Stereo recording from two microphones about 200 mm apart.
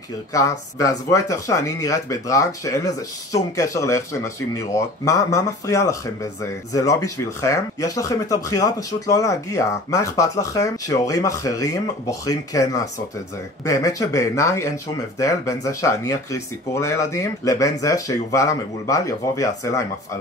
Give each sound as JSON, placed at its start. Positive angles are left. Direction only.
{"t": 0.3, "sound": "speech", "side_deg": 15}